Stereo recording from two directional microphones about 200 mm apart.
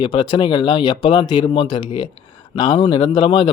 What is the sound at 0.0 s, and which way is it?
Speech, 25° left (ahead or behind).